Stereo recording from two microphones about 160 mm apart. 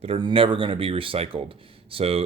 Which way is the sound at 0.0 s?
35° right (ahead or behind).